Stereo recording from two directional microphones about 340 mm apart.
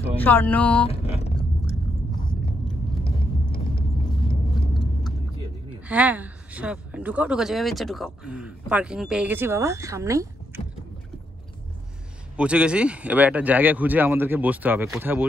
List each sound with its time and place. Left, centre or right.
0.2 s speech: centre
0.8 s vehicle: centre
5.9 s speech: centre
12.4 s speech: centre